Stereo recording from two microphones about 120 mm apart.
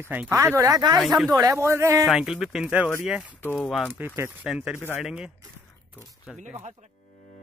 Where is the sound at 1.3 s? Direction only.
25° right (ahead or behind).